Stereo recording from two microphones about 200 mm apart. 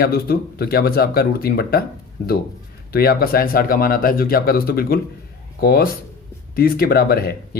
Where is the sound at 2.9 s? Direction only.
50° left (ahead or behind).